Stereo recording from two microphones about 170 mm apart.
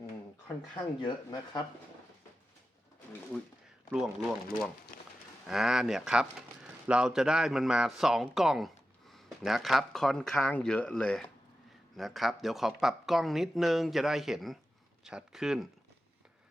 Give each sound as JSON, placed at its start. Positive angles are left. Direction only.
{"t": 0.7, "sound": "speech", "side_deg": 25}
{"t": 3.9, "sound": "speech", "side_deg": 0}
{"t": 4.9, "sound": "a sound", "side_deg": 55}
{"t": 5.5, "sound": "speech", "side_deg": 0}